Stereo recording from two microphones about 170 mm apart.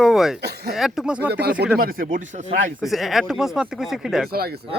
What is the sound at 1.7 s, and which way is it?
Speech, 60° right (ahead or behind).